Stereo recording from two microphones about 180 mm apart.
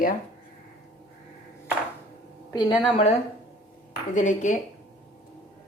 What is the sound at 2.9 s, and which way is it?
Speech, 35° left (ahead or behind).